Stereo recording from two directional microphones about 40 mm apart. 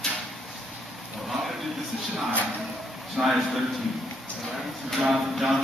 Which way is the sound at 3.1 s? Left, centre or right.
Centre.